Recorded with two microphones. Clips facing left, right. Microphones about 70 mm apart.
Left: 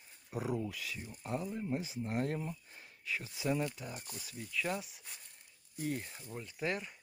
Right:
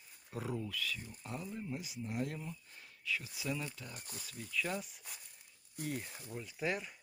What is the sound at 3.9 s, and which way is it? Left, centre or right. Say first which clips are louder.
Speech: left 3 dB; left.